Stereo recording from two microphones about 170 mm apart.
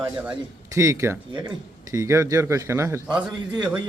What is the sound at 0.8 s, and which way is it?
A man's voice, 15° right (ahead or behind).